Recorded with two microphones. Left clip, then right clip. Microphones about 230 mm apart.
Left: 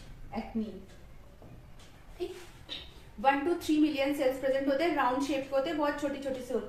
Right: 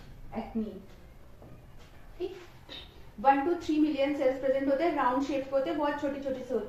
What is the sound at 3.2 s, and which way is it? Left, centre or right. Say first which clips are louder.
A woman's voice: right 2 dB; left.